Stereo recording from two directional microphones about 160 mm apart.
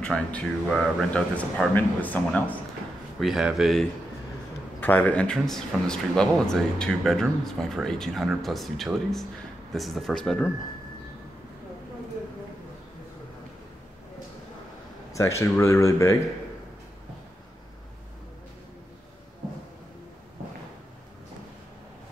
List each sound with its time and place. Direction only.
0.0 s speech: 5° left (ahead or behind)
3.2 s speech: centre (ahead or behind)
4.7 s speech: 10° left (ahead or behind)
15.1 s speech: 20° left (ahead or behind)